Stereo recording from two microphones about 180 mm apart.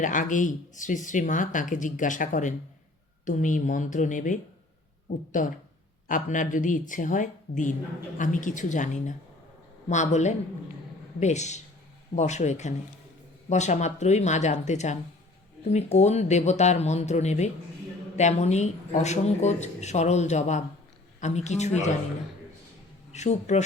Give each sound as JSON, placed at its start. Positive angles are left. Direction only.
{"t": 0.0, "sound": "speech", "side_deg": 45}
{"t": 23.1, "sound": "speech", "side_deg": 40}